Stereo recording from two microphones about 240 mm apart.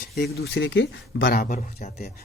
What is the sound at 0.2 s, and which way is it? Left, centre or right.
Speech, left.